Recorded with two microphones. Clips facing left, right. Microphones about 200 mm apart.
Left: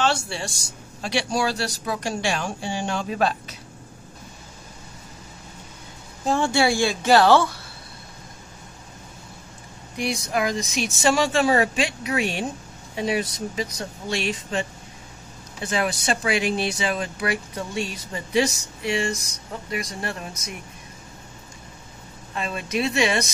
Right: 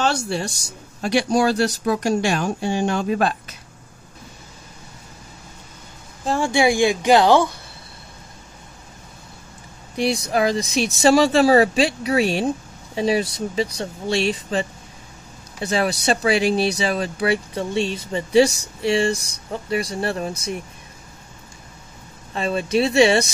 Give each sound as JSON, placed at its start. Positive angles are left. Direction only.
{"t": 1.0, "sound": "speech", "side_deg": -50}
{"t": 6.4, "sound": "speech", "side_deg": -15}
{"t": 9.9, "sound": "speech", "side_deg": -35}
{"t": 22.3, "sound": "speech", "side_deg": -30}